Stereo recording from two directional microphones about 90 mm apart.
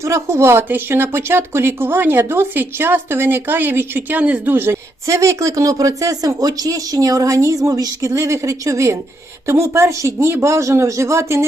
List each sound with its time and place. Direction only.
0.0 s speech: 30° right (ahead or behind)